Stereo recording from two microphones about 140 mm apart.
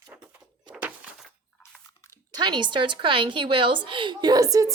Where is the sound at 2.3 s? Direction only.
35° right (ahead or behind).